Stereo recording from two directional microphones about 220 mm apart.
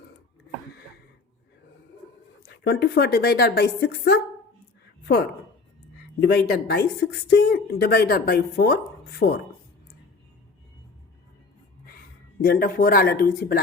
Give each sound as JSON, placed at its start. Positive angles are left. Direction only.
{"t": 2.6, "sound": "speech", "side_deg": 50}
{"t": 6.1, "sound": "speech", "side_deg": 50}
{"t": 12.4, "sound": "speech", "side_deg": 40}